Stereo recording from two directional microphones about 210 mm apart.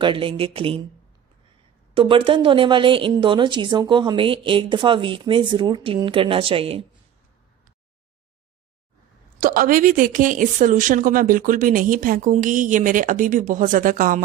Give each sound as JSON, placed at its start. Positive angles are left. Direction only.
{"t": 0.0, "sound": "a woman's voice", "side_deg": -25}
{"t": 2.0, "sound": "a woman's voice", "side_deg": -25}
{"t": 9.4, "sound": "a woman's voice", "side_deg": -40}